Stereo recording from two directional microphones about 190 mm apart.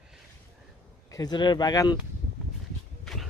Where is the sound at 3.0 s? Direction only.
Centre (ahead or behind).